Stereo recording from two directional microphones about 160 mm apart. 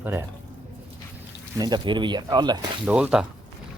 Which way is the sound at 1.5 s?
25° right (ahead or behind).